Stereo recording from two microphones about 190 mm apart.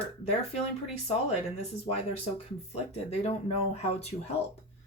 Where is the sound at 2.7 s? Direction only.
35° left (ahead or behind).